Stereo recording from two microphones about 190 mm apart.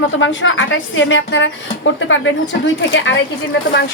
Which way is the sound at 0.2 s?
90° left.